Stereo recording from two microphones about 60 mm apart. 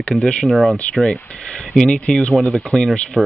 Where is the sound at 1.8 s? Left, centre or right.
Centre.